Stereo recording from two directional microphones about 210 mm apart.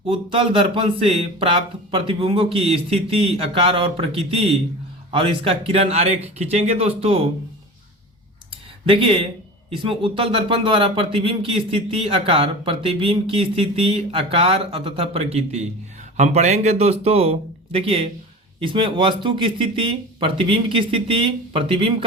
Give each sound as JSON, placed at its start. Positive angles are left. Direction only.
{"t": 0.0, "sound": "speech", "side_deg": -25}
{"t": 8.9, "sound": "speech", "side_deg": -25}